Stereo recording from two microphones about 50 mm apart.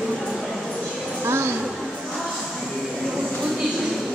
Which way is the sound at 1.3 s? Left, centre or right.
Right.